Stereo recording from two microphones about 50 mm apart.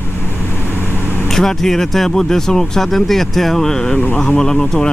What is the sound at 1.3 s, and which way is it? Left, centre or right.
Speech, centre.